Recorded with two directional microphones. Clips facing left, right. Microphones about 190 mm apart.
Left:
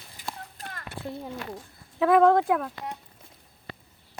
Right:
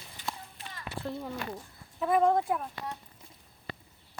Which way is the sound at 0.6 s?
55° left (ahead or behind).